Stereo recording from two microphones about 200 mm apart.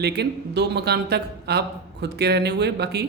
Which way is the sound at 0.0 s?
55° right (ahead or behind).